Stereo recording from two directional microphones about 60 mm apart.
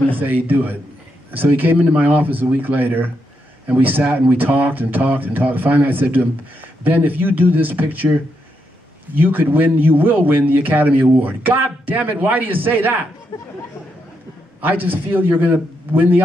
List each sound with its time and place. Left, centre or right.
0.3 s a man's voice: right
9.1 s a man's voice: right
13.3 s speech: left
14.6 s a man's voice: right